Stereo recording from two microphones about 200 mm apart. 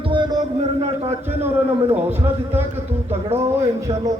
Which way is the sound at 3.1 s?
30° right (ahead or behind).